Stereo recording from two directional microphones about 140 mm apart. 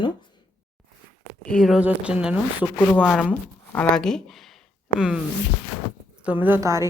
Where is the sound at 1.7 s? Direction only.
10° right (ahead or behind).